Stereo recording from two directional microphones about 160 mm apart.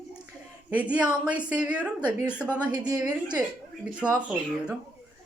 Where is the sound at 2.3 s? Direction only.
10° left (ahead or behind).